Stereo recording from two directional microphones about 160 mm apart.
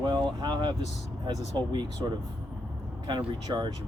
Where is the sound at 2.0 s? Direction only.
25° right (ahead or behind).